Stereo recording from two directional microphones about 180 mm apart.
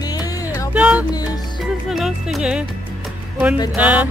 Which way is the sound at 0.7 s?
5° right (ahead or behind).